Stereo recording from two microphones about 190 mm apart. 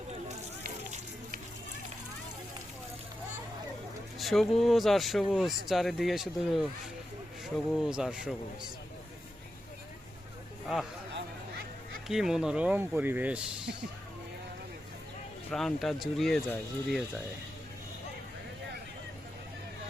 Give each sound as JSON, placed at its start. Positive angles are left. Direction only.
{"t": 0.3, "sound": "a sound", "side_deg": -40}
{"t": 4.2, "sound": "speech", "side_deg": 0}
{"t": 12.0, "sound": "speech", "side_deg": 0}
{"t": 15.4, "sound": "speech", "side_deg": 0}